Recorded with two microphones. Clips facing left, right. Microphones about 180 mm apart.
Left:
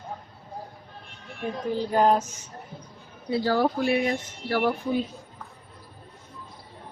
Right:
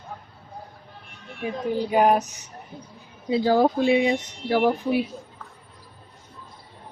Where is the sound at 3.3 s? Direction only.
20° right (ahead or behind).